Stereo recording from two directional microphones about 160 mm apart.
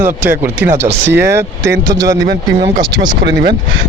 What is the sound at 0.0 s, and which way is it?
Speech, 15° right (ahead or behind).